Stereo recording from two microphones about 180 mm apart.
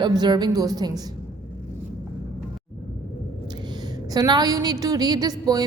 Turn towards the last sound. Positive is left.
turn(degrees=-20)  # may be behind; listen again after turning